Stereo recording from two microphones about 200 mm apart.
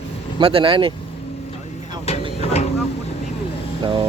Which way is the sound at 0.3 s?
25° right (ahead or behind).